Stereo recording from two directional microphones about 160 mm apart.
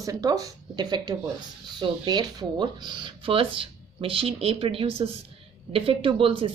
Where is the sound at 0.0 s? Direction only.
20° right (ahead or behind).